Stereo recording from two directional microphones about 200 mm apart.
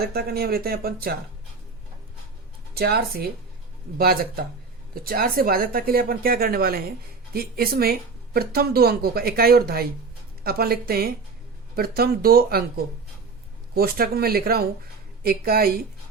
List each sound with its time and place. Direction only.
0.0 s speech: 50° right (ahead or behind)
2.7 s speech: 50° right (ahead or behind)